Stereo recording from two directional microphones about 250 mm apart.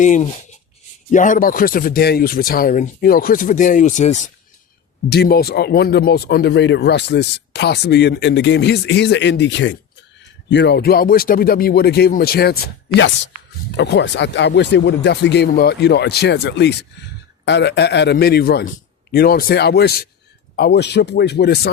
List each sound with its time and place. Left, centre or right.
0.0 s speech: left
5.0 s speech: left